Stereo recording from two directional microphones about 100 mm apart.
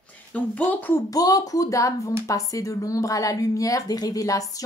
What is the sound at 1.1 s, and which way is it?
Speech, 40° left (ahead or behind).